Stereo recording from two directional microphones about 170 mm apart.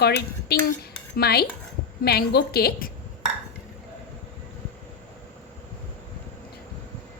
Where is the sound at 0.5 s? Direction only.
65° left (ahead or behind).